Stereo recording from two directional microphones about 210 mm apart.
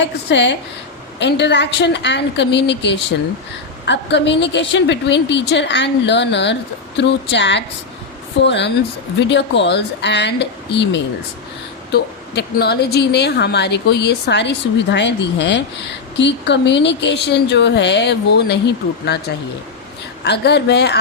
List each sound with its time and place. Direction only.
0.3 s a woman's voice: 55° left (ahead or behind)
20.2 s a woman's voice: 50° left (ahead or behind)